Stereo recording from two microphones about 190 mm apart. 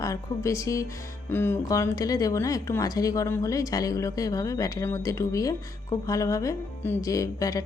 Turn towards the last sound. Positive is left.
turn(degrees=20)  # may be behind; listen again after turning